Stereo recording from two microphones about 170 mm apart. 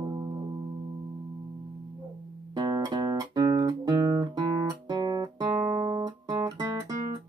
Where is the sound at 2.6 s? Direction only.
25° right (ahead or behind).